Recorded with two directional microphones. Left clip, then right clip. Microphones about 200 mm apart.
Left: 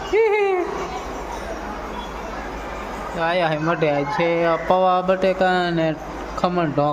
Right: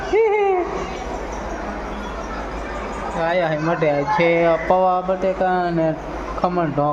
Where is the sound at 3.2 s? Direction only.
5° left (ahead or behind).